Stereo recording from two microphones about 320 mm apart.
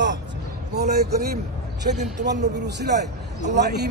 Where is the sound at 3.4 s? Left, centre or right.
Right.